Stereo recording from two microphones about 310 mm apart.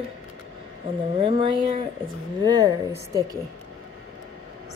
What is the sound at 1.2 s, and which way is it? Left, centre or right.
A woman's voice, centre.